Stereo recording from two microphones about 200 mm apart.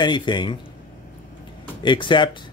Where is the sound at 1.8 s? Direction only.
25° left (ahead or behind).